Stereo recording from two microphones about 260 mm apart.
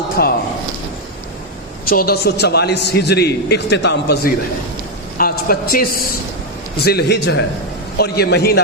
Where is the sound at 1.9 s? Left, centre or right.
Left.